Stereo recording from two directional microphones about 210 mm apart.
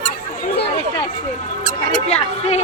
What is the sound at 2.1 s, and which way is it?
Speech, 30° left (ahead or behind).